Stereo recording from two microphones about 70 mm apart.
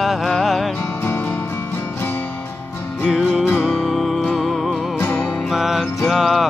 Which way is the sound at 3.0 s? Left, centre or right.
Centre.